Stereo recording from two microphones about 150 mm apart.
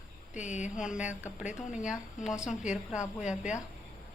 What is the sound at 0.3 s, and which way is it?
Speech, 55° left (ahead or behind).